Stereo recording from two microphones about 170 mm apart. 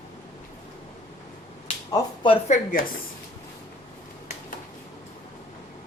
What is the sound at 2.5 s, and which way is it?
Speech, 50° left (ahead or behind).